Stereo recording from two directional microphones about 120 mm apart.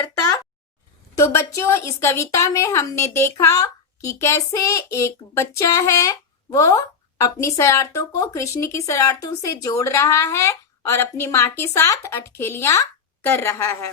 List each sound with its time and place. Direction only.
1.1 s a woman's voice: 25° left (ahead or behind)
1.5 s child singing: 20° left (ahead or behind)